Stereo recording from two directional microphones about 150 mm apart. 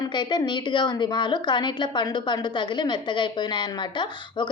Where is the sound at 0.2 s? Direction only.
30° left (ahead or behind).